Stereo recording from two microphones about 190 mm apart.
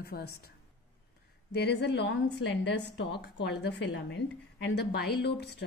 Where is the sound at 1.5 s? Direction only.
60° left (ahead or behind).